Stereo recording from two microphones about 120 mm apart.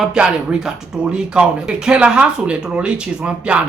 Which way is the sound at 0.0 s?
5° right (ahead or behind).